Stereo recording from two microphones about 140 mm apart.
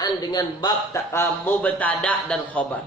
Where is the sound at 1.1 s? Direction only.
15° left (ahead or behind).